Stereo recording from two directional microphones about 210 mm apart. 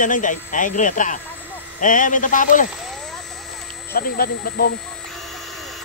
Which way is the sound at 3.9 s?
45° left (ahead or behind).